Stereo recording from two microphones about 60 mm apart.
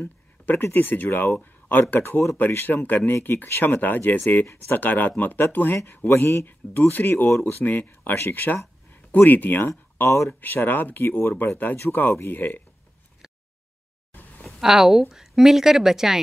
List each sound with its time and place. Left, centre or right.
0.0 s a sound: left
0.7 s speech: left
2.0 s speech: left
10.4 s speech: left
14.6 s speech: centre